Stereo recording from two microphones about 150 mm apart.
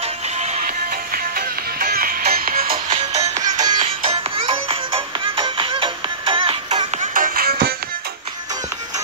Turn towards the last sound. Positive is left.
turn(degrees=-80)